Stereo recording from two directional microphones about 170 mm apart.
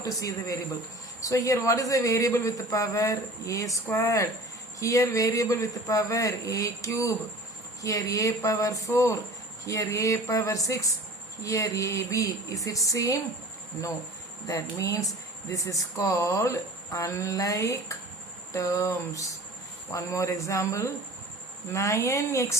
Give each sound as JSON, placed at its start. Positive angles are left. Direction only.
{"t": 0.0, "sound": "speech", "side_deg": 20}
{"t": 14.4, "sound": "speech", "side_deg": 20}